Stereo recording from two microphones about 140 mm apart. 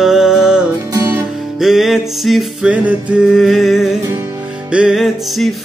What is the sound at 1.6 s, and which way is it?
Music, 5° right (ahead or behind).